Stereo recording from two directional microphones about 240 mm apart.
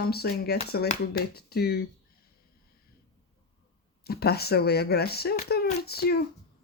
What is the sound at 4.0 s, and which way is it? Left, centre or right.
Speech, left.